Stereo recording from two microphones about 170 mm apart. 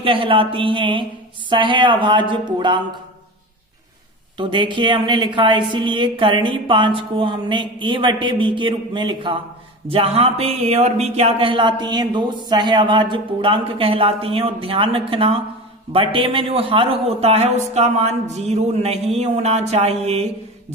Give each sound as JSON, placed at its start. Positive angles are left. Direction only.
{"t": 0.0, "sound": "speech", "side_deg": -30}
{"t": 4.4, "sound": "speech", "side_deg": -30}